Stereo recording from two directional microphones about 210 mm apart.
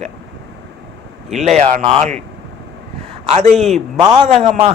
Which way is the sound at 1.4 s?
35° right (ahead or behind).